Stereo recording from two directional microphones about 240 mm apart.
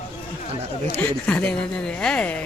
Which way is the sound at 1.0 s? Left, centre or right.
Centre.